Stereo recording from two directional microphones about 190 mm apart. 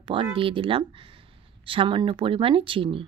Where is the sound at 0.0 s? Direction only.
25° right (ahead or behind).